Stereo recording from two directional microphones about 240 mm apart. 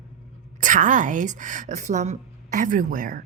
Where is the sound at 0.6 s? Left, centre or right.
Right.